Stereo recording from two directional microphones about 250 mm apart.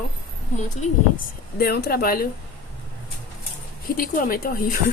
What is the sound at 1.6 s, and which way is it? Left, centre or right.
Speech, left.